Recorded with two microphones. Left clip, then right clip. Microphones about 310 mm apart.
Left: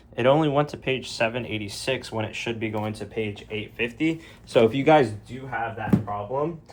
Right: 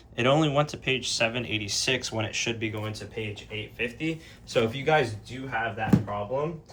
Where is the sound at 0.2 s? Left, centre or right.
Centre.